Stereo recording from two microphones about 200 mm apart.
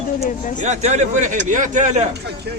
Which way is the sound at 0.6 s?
35° right (ahead or behind).